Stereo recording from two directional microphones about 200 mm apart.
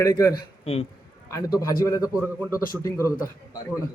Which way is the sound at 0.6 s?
30° left (ahead or behind).